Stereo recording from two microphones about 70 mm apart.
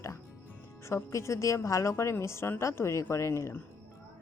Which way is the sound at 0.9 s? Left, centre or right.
Left.